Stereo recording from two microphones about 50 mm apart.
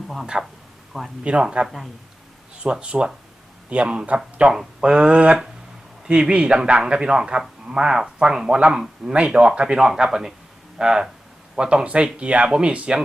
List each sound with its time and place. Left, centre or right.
0.3 s speech: centre
1.6 s speech: centre
2.6 s speech: centre
8.5 s speech: right
9.7 s speech: centre